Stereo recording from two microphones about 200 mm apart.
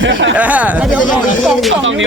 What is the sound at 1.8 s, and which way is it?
Speech, 75° right (ahead or behind).